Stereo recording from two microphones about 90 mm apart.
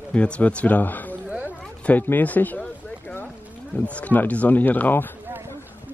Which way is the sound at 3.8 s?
15° left (ahead or behind).